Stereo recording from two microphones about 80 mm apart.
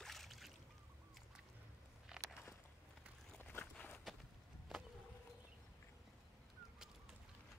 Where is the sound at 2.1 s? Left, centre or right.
Centre.